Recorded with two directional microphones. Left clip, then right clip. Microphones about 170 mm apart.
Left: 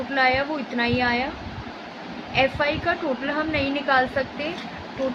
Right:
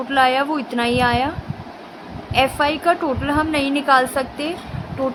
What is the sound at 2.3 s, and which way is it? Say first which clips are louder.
A woman's voice: right 4 dB; 60° right (ahead or behind).